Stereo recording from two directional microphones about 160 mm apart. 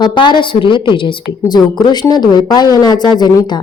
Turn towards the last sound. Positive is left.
turn(degrees=25)  # may be behind; listen again after turning